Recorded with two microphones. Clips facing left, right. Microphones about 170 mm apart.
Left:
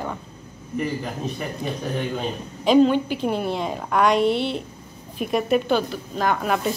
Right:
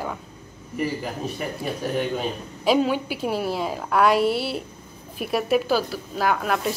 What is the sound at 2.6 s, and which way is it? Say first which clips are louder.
A woman's voice: left 4 dB; 5° right (ahead or behind).